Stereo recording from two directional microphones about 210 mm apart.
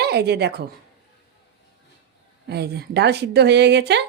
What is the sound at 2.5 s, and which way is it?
Speech, 50° right (ahead or behind).